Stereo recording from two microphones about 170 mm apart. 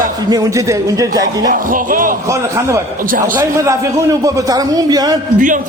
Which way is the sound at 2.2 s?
15° right (ahead or behind).